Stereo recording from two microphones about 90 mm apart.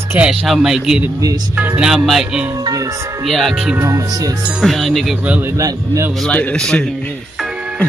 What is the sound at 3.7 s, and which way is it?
Speech, 35° right (ahead or behind).